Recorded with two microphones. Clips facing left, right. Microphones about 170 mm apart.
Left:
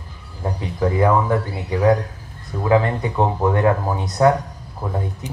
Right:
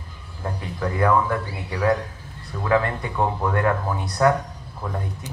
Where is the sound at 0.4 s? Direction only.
20° left (ahead or behind).